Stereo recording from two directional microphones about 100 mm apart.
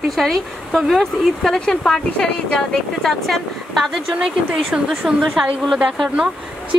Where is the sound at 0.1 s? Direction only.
5° left (ahead or behind).